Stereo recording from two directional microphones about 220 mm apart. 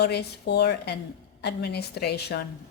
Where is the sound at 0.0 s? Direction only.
50° left (ahead or behind).